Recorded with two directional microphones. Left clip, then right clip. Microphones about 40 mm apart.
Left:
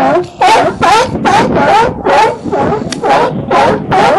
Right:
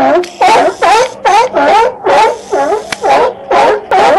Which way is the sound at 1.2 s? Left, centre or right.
Left.